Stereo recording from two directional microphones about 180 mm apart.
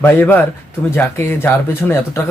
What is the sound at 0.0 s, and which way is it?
Speech, 10° left (ahead or behind).